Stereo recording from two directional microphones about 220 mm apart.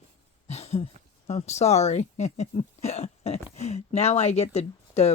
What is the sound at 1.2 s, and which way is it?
Speech, 30° left (ahead or behind).